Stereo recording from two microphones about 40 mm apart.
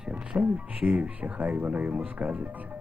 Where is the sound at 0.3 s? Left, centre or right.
Right.